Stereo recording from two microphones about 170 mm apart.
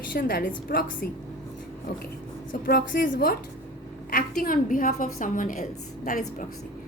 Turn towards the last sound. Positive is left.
turn(degrees=50)  # may be behind; listen again after turning